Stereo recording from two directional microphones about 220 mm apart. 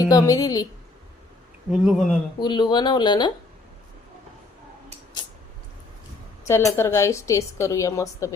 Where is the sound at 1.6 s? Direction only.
Centre (ahead or behind).